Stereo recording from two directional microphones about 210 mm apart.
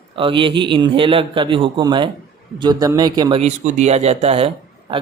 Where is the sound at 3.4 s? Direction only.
35° right (ahead or behind).